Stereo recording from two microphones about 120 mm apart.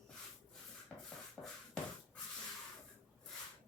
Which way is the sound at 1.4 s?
25° left (ahead or behind).